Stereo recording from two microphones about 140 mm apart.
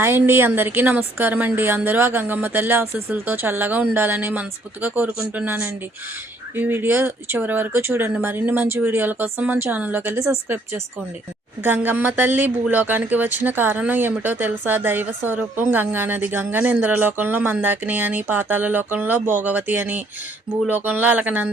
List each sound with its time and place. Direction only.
0.0 s speech: 15° right (ahead or behind)